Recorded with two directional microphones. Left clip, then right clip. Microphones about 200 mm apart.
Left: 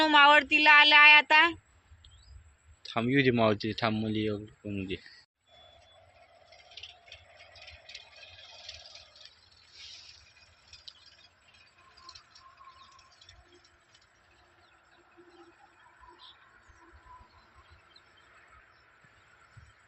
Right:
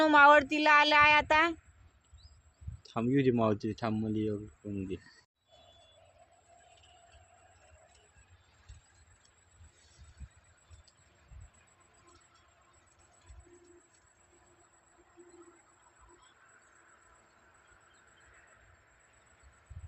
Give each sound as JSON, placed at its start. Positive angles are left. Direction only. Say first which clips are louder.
{"t": 0.0, "sound": "speech", "louder": "left 1 dB", "side_deg": -50}
{"t": 2.8, "sound": "speech", "louder": "left 3 dB", "side_deg": -5}
{"t": 6.8, "sound": "a sound", "louder": "left 13 dB", "side_deg": -25}